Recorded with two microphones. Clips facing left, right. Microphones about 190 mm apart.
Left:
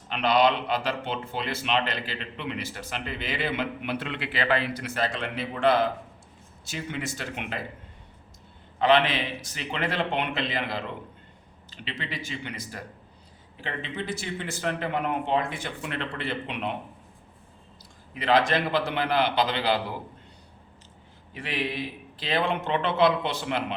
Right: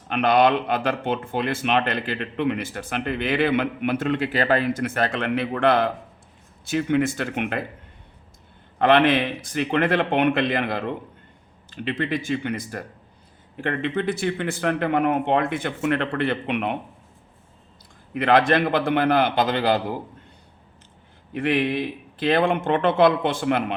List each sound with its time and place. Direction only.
0.1 s a man's voice: 50° right (ahead or behind)
8.8 s a man's voice: 55° right (ahead or behind)
18.1 s a man's voice: 55° right (ahead or behind)
21.3 s a man's voice: 55° right (ahead or behind)